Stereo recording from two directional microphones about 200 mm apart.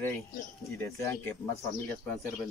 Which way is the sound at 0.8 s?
15° left (ahead or behind).